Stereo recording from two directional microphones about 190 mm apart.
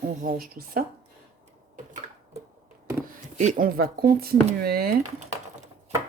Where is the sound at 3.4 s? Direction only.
40° right (ahead or behind).